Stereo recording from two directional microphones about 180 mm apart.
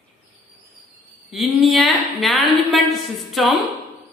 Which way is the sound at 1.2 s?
Centre (ahead or behind).